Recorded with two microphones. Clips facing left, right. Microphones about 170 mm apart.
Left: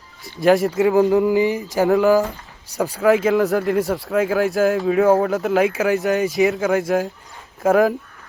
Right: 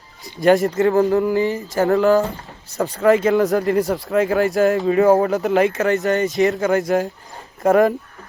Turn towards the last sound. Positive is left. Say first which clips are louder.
# right 1 dB
turn(degrees=0)  # may be behind; listen again after turning